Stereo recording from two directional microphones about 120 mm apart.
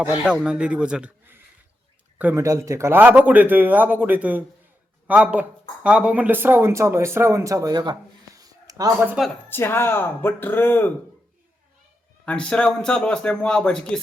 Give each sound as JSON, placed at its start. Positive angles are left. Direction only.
{"t": 0.0, "sound": "speech", "side_deg": -10}
{"t": 2.3, "sound": "speech", "side_deg": -25}
{"t": 9.5, "sound": "speech", "side_deg": 20}
{"t": 12.2, "sound": "a man's voice", "side_deg": 10}